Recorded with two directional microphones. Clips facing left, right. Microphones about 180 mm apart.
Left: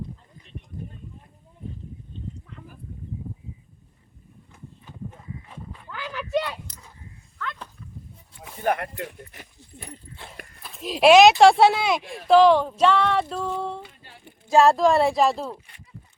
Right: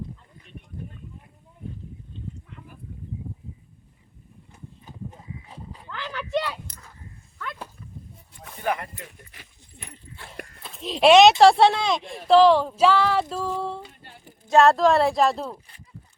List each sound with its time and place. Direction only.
4.5 s horse: 35° right (ahead or behind)
5.9 s a sound: 10° left (ahead or behind)
6.7 s a sound: 55° right (ahead or behind)
7.4 s dog: 10° right (ahead or behind)
8.6 s speech: 60° left (ahead or behind)
10.1 s horse: 40° left (ahead or behind)
10.7 s speech: centre (ahead or behind)